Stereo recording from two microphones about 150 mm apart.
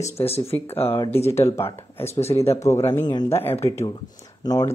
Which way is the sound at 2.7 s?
15° left (ahead or behind).